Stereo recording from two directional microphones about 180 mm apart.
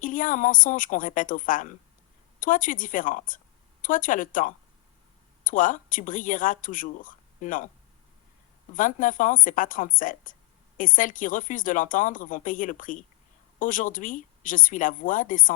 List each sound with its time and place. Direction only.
0.0 s a woman's voice: 45° left (ahead or behind)
8.7 s speech: 45° left (ahead or behind)